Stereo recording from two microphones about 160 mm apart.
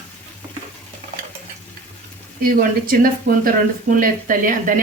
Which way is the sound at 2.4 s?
65° right (ahead or behind).